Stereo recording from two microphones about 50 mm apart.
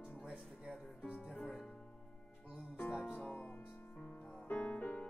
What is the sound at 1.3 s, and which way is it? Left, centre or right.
Speech, left.